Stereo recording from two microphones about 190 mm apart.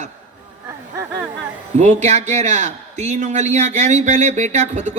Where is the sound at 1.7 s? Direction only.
35° right (ahead or behind).